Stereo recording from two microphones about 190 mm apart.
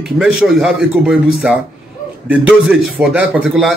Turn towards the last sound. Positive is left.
turn(degrees=-5)  # may be behind; listen again after turning